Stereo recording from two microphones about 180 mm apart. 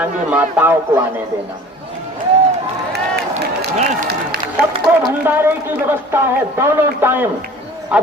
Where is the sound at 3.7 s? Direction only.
45° right (ahead or behind).